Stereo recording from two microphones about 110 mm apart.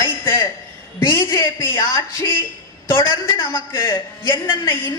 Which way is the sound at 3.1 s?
45° left (ahead or behind).